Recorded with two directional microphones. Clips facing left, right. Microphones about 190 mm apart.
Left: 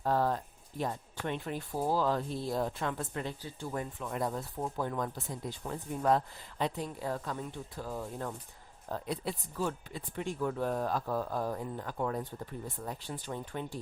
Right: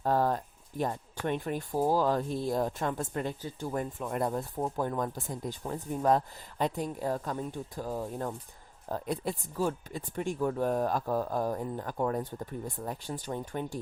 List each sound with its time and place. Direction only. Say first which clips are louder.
0.0 s a sound: right 2 dB; 45° right (ahead or behind)
0.8 s speech: right 3 dB; 50° right (ahead or behind)
5.6 s a woman's voice: right 2 dB; 35° right (ahead or behind)